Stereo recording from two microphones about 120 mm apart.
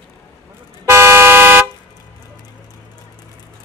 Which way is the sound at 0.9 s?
20° right (ahead or behind).